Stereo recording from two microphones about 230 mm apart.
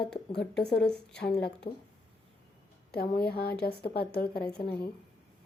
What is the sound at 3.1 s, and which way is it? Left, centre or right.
Speech, left.